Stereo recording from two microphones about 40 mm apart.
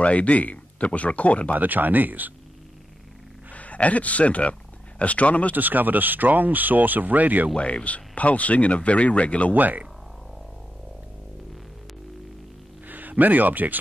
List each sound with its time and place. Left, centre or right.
0.0 s speech: left
1.5 s speech: right
3.5 s speech: left
5.5 s speech: right
7.5 s speech: left
9.5 s speech: right
12.8 s speech: right